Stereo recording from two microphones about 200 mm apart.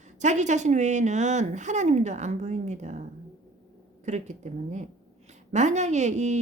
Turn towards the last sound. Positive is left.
turn(degrees=-35)  # may be behind; listen again after turning